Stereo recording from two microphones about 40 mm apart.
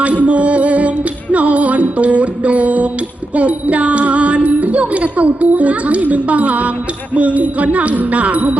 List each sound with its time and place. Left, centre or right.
0.0 s music: right